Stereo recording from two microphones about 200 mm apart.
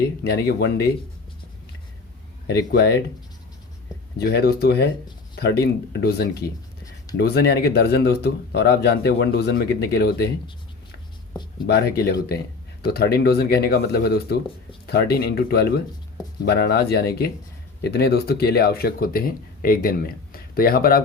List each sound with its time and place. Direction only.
0.3 s speech: 50° left (ahead or behind)
2.5 s speech: 55° left (ahead or behind)
4.2 s speech: 50° left (ahead or behind)
11.6 s speech: 50° left (ahead or behind)